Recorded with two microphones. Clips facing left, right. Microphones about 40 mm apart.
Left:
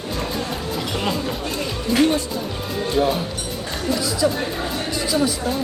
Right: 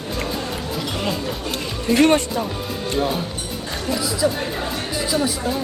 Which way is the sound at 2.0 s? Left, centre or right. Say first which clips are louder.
Right 3 dB; right.